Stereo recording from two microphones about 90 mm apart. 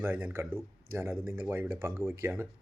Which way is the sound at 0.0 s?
25° right (ahead or behind).